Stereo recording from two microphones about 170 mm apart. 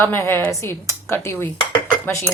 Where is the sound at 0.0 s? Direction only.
10° left (ahead or behind).